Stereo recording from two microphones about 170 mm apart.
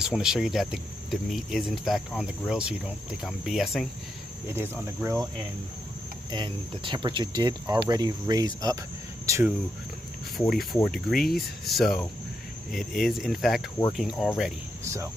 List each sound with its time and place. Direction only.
0.0 s speech: 5° right (ahead or behind)
4.5 s speech: 15° right (ahead or behind)
6.3 s speech: 30° right (ahead or behind)
10.5 s speech: centre (ahead or behind)